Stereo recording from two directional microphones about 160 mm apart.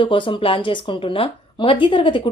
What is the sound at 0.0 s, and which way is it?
A woman's voice, 30° left (ahead or behind).